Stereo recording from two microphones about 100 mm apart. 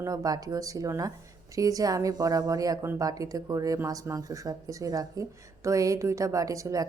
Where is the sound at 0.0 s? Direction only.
35° right (ahead or behind).